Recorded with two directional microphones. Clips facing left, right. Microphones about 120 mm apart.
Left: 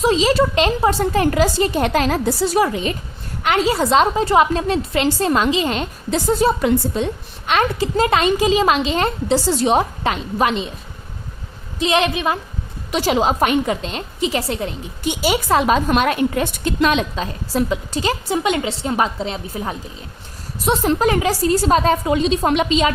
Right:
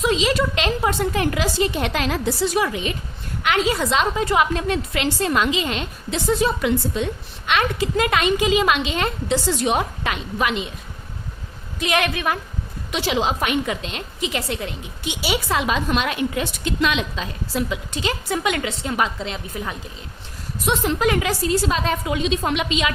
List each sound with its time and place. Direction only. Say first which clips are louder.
0.0 s a woman's voice: left 4 dB; 35° left (ahead or behind)
11.8 s a woman's voice: left 4 dB; 25° left (ahead or behind)
12.9 s a woman's voice: left 5 dB; 45° left (ahead or behind)